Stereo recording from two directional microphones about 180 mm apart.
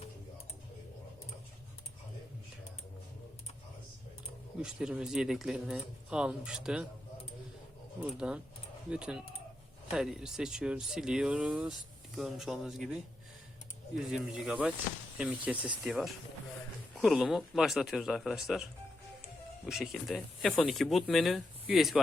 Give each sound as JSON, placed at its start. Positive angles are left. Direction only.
{"t": 4.6, "sound": "speech", "side_deg": -5}
{"t": 8.2, "sound": "speech", "side_deg": -5}